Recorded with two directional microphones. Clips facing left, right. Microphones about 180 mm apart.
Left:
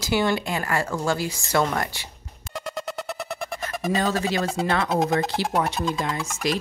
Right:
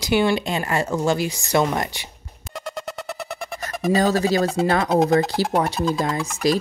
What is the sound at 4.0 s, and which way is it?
Speech, 40° right (ahead or behind).